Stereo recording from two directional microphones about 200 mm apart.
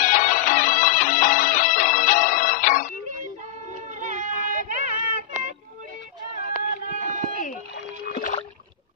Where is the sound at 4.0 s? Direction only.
40° right (ahead or behind).